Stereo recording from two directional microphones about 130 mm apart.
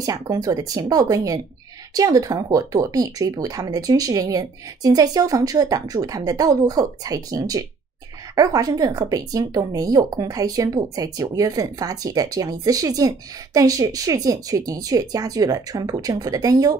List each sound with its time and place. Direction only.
0.0 s speech: 25° right (ahead or behind)